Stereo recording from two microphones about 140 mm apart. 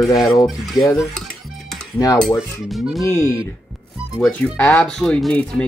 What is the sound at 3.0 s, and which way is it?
Speech, 20° left (ahead or behind).